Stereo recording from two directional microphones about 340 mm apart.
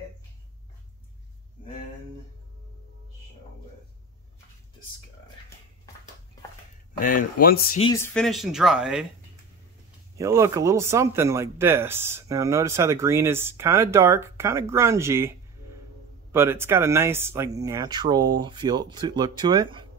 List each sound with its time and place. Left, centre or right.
7.0 s speech: left
7.8 s speech: centre
10.1 s speech: centre